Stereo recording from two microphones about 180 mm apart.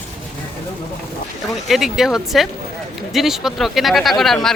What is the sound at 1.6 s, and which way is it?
A woman's voice, centre (ahead or behind).